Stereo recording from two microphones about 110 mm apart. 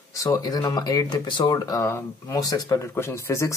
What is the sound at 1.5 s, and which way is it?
Speech, 30° left (ahead or behind).